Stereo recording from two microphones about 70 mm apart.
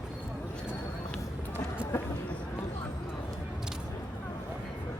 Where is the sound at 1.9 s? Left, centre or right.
Left.